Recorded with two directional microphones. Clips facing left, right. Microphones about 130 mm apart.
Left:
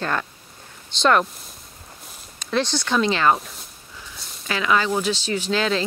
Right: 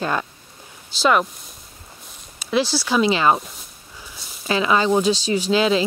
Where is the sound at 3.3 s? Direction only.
Centre (ahead or behind).